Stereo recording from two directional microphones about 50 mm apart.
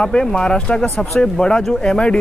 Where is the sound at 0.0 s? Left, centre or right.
Centre.